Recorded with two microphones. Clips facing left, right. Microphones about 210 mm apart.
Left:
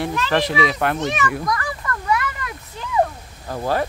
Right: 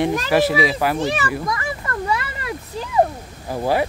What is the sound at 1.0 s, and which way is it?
Speech, 35° right (ahead or behind).